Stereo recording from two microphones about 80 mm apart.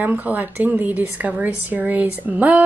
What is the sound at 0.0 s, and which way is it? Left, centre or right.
A woman's voice, right.